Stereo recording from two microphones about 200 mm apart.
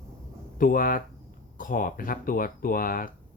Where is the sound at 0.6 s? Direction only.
45° left (ahead or behind).